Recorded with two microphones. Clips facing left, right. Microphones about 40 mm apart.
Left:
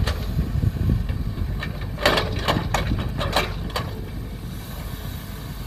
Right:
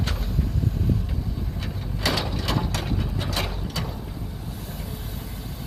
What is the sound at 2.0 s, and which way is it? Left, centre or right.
Gears, left.